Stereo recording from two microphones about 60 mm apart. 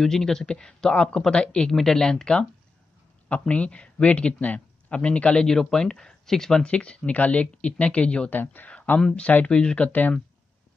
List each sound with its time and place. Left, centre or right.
0.0 s speech: centre
8.3 s speech: left